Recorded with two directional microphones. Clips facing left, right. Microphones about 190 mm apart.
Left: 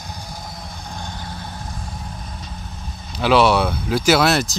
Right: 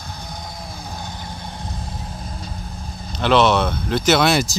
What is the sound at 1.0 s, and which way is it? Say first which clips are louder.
Vehicle: left 1 dB; 10° right (ahead or behind).